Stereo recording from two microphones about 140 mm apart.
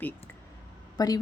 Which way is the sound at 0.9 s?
25° left (ahead or behind).